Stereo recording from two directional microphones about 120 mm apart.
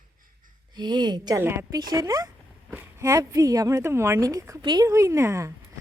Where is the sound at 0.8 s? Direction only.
35° right (ahead or behind).